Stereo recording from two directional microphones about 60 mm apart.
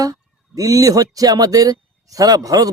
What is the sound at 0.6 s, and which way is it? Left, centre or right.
Speech, right.